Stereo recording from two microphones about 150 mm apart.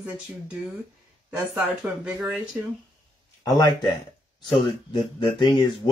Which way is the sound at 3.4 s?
25° left (ahead or behind).